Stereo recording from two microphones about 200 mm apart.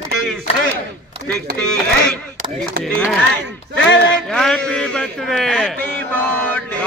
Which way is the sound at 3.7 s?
65° left (ahead or behind).